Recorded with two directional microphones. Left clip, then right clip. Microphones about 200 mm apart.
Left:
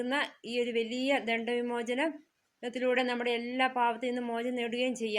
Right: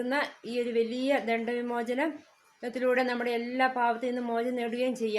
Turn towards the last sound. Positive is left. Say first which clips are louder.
# right 2 dB
turn(degrees=20)  # may be behind; listen again after turning